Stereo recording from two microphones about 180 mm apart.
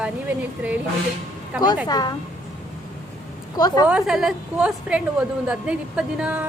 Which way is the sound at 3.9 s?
Centre (ahead or behind).